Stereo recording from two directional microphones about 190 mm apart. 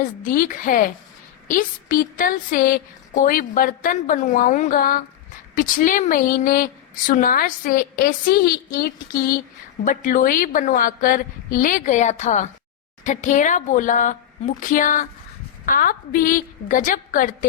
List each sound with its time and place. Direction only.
0.0 s a woman's voice: 45° left (ahead or behind)